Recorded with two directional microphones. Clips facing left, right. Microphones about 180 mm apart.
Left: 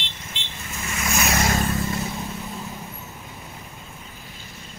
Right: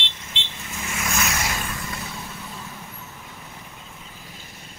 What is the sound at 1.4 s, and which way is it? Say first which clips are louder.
Vehicle: left 7 dB; 35° left (ahead or behind).